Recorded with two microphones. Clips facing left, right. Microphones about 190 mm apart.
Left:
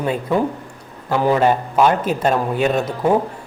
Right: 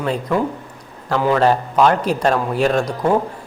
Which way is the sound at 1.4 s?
10° left (ahead or behind).